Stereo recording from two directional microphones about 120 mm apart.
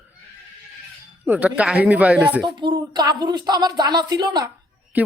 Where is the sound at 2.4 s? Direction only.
40° right (ahead or behind).